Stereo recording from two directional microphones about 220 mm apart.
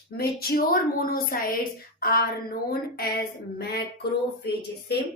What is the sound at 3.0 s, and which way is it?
Speech, 45° left (ahead or behind).